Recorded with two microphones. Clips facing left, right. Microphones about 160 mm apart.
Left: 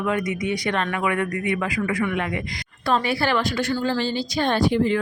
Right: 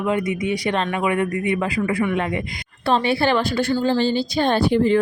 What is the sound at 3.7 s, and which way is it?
Speech, 20° right (ahead or behind).